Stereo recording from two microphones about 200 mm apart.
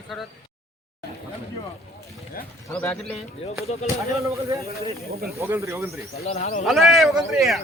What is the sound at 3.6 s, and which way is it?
Speech, 30° left (ahead or behind).